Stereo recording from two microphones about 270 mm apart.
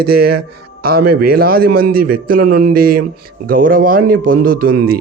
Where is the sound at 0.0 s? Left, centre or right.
Right.